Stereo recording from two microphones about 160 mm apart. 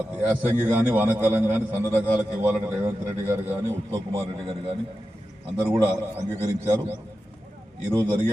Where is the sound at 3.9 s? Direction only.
35° right (ahead or behind).